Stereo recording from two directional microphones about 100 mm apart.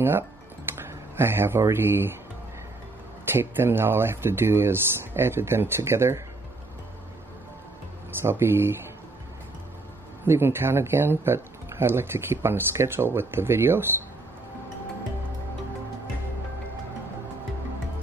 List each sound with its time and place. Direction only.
0.7 s speech: 25° right (ahead or behind)
3.3 s speech: 20° right (ahead or behind)
8.2 s speech: 25° right (ahead or behind)
10.2 s speech: 25° right (ahead or behind)